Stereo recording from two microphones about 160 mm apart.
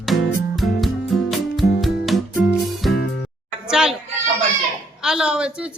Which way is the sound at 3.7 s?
5° right (ahead or behind).